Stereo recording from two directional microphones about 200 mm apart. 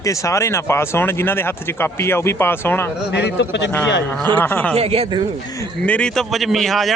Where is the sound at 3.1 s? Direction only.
60° left (ahead or behind).